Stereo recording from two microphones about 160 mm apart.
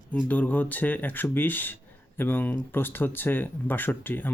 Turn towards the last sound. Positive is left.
turn(degrees=15)  # may be behind; listen again after turning